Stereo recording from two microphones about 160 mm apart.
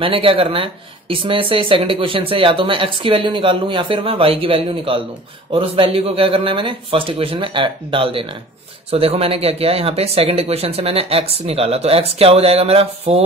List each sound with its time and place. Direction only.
0.0 s speech: 35° right (ahead or behind)